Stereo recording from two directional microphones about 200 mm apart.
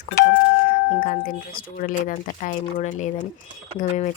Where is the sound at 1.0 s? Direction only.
40° left (ahead or behind).